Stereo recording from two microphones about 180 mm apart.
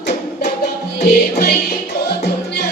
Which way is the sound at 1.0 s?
65° left (ahead or behind).